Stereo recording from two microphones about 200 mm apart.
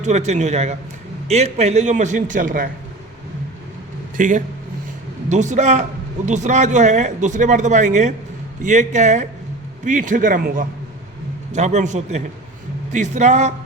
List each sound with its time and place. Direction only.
0.0 s speech: 35° right (ahead or behind)
4.2 s speech: 40° right (ahead or behind)